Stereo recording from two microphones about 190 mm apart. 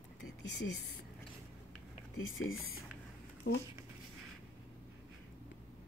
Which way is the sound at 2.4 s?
90° left.